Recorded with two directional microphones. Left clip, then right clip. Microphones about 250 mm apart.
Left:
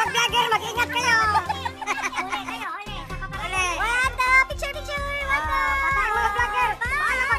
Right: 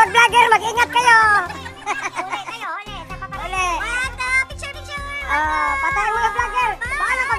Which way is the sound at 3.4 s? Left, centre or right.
Centre.